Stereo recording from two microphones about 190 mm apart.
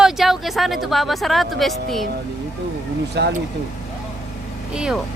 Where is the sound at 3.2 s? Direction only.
65° right (ahead or behind).